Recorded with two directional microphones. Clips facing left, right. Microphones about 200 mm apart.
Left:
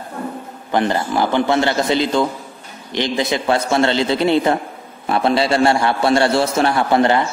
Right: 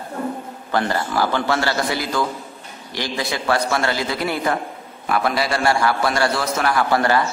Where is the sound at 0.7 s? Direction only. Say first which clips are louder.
Left 4 dB; 20° left (ahead or behind).